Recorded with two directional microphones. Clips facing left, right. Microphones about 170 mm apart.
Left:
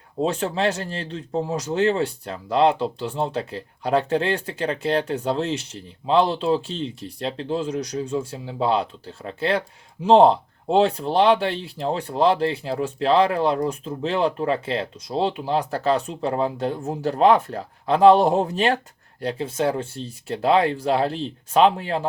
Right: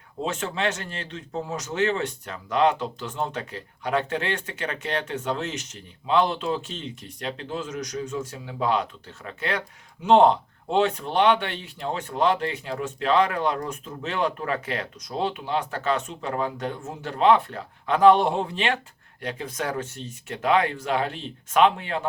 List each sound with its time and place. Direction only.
0.2 s speech: 35° left (ahead or behind)